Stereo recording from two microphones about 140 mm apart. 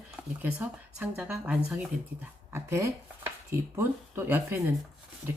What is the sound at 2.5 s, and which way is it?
Speech, 20° right (ahead or behind).